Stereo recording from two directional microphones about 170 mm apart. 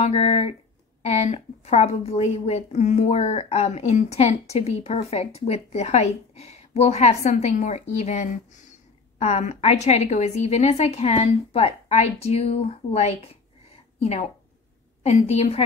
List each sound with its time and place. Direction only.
0.0 s a woman's voice: 35° left (ahead or behind)